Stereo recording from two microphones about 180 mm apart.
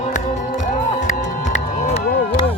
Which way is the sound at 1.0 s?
40° left (ahead or behind).